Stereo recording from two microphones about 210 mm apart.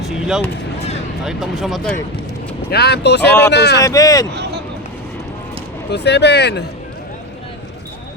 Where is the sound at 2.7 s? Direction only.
50° left (ahead or behind).